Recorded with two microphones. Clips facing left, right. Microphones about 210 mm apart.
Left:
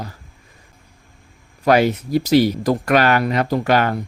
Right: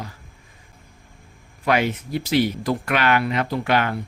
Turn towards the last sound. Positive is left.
turn(degrees=40)  # may be behind; listen again after turning